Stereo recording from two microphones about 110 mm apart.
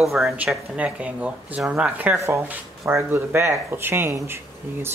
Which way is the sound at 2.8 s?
20° right (ahead or behind).